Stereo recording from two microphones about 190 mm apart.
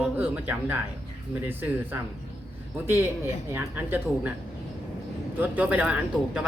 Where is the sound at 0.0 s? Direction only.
10° right (ahead or behind).